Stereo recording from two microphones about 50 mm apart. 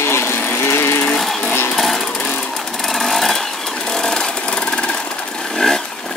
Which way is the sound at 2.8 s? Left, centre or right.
Centre.